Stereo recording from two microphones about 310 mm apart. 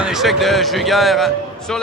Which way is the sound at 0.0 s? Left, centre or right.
Centre.